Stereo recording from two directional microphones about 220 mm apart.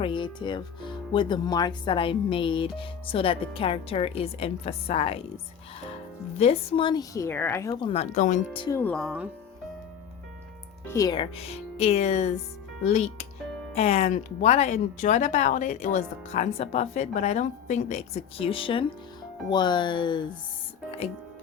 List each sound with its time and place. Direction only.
0.0 s speech: 20° left (ahead or behind)
6.4 s speech: 25° left (ahead or behind)
8.6 s speech: 10° left (ahead or behind)
10.8 s speech: 15° left (ahead or behind)